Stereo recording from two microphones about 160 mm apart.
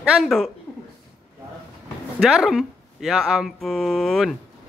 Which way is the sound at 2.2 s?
Centre (ahead or behind).